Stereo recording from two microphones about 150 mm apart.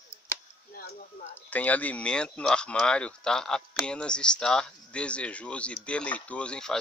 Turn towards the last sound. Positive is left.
turn(degrees=5)  # may be behind; listen again after turning